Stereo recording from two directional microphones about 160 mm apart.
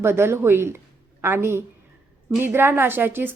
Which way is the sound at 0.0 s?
15° right (ahead or behind).